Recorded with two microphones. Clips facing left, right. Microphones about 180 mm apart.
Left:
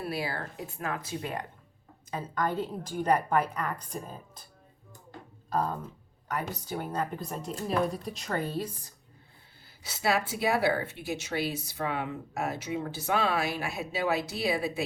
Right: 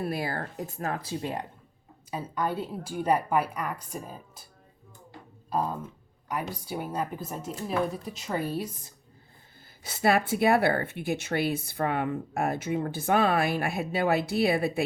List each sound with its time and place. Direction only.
0.0 s speech: 50° right (ahead or behind); by 1.5 s 30° right (ahead or behind)
2.0 s a woman's voice: 10° right (ahead or behind)
5.5 s a woman's voice: 10° right (ahead or behind)
9.8 s a woman's voice: 50° right (ahead or behind)